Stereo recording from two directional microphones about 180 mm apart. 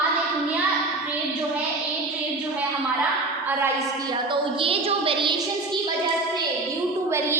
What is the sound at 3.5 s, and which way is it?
A woman's voice, 15° right (ahead or behind).